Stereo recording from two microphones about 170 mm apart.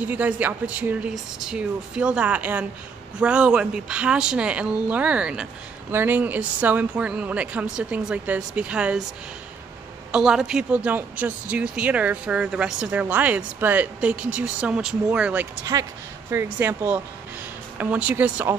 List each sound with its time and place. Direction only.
0.0 s a woman's voice: 10° right (ahead or behind)
10.1 s a woman's voice: 5° right (ahead or behind)
15.6 s a woman's voice: 20° right (ahead or behind)